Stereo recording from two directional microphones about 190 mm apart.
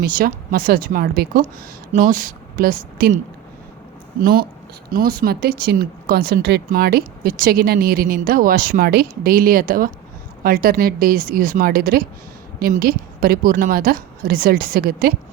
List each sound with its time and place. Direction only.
0.0 s a woman's voice: 50° right (ahead or behind)
4.2 s speech: 50° right (ahead or behind)